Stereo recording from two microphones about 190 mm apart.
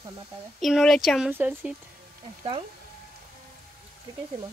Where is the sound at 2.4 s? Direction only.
30° right (ahead or behind).